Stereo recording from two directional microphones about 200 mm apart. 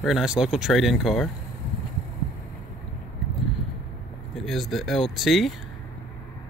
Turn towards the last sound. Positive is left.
turn(degrees=0)  # may be behind; listen again after turning